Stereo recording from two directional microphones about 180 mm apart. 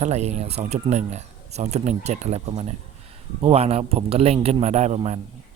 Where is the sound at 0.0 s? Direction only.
40° right (ahead or behind).